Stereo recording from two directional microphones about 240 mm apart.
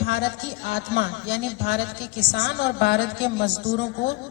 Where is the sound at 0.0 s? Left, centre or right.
Left.